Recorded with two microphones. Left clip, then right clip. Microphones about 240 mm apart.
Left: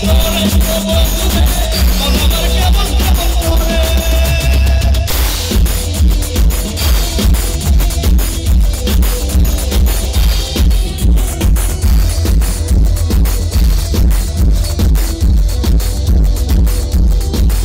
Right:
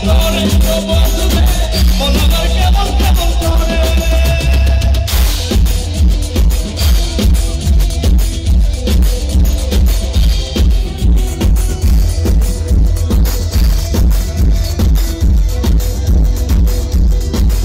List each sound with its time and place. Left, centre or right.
0.0 s music: left
6.3 s music: left